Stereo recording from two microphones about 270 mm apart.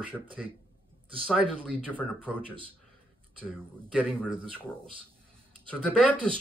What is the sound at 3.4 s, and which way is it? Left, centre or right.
Speech, centre.